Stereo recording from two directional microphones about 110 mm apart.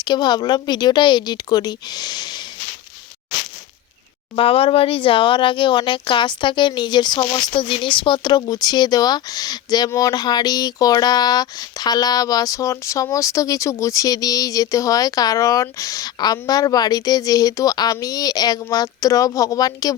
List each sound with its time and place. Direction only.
0.0 s speech: 40° left (ahead or behind)
4.4 s speech: 55° left (ahead or behind); by 19.9 s 35° left (ahead or behind)